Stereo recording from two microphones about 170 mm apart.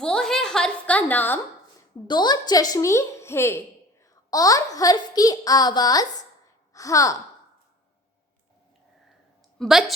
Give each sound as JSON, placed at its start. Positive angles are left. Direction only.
{"t": 0.0, "sound": "a sound", "side_deg": 5}
{"t": 2.0, "sound": "a woman's voice", "side_deg": 25}
{"t": 9.6, "sound": "a woman's voice", "side_deg": 0}